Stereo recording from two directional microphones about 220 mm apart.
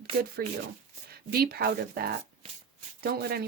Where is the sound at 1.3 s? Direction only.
45° right (ahead or behind).